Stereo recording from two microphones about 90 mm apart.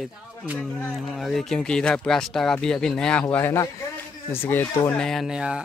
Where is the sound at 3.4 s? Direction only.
30° left (ahead or behind).